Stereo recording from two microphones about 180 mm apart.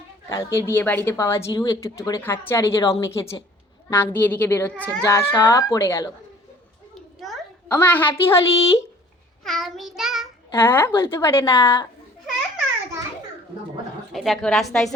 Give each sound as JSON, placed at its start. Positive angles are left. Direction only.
{"t": 0.3, "sound": "a woman's voice", "side_deg": 15}
{"t": 5.0, "sound": "a woman's voice", "side_deg": 15}
{"t": 7.7, "sound": "a woman's voice", "side_deg": 10}
{"t": 9.4, "sound": "child singing", "side_deg": 0}
{"t": 10.5, "sound": "a woman's voice", "side_deg": 10}
{"t": 14.1, "sound": "a woman's voice", "side_deg": 0}